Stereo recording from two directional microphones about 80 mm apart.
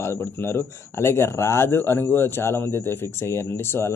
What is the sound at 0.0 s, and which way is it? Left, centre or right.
Speech, left.